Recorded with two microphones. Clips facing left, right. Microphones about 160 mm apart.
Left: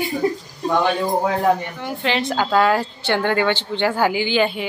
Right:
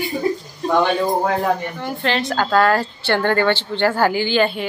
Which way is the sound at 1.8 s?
10° left (ahead or behind).